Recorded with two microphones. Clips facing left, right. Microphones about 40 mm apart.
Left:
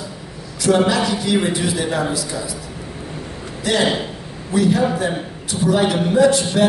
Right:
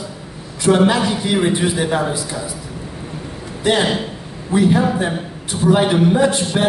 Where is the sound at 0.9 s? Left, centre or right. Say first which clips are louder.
Right 1 dB; right.